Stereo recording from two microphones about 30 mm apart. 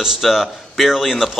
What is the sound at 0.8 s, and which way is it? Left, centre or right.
Speech, centre.